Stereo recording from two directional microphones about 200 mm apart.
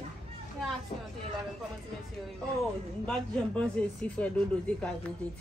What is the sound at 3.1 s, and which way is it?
Speech, 5° left (ahead or behind).